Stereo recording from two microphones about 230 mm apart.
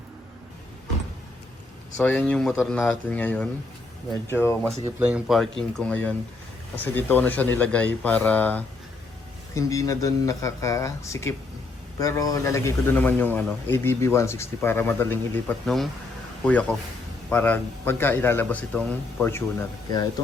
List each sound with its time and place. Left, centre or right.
2.0 s a man's voice: centre
4.9 s a man's voice: centre